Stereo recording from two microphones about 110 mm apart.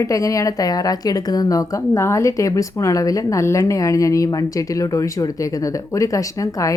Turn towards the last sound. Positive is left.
turn(degrees=30)  # may be behind; listen again after turning